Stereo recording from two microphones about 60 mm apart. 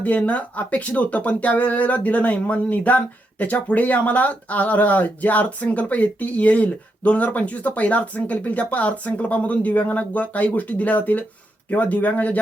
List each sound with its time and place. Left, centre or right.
0.0 s speech: left